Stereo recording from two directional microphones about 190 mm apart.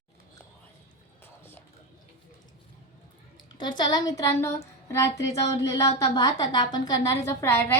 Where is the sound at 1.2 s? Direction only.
10° left (ahead or behind).